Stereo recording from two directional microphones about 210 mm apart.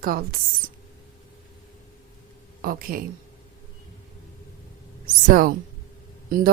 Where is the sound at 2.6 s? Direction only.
45° right (ahead or behind).